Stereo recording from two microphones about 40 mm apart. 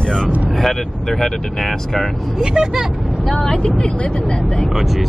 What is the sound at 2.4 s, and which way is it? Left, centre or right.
Speech, centre.